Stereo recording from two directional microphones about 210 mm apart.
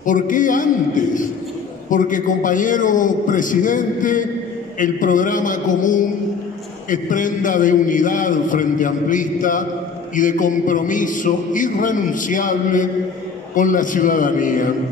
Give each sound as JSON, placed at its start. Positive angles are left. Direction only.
{"t": 0.0, "sound": "a man's voice", "side_deg": 40}